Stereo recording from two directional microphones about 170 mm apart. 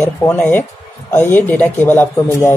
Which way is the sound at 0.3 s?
10° left (ahead or behind).